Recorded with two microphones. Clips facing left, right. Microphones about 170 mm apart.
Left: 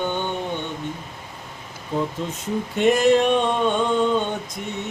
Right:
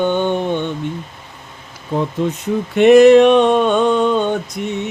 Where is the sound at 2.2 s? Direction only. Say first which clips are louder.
Right 10 dB; 65° right (ahead or behind).